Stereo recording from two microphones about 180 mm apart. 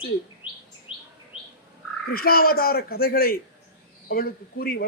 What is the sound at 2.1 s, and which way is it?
A man's voice, 55° left (ahead or behind).